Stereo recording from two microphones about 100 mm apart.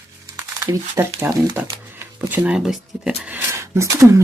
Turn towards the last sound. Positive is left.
turn(degrees=-30)  # may be behind; listen again after turning